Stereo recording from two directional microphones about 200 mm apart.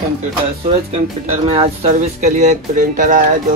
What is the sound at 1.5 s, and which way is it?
Speech, 30° right (ahead or behind).